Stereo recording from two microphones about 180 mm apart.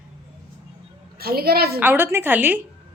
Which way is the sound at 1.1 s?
60° right (ahead or behind).